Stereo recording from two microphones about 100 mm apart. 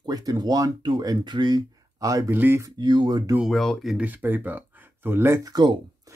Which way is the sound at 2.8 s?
50° right (ahead or behind).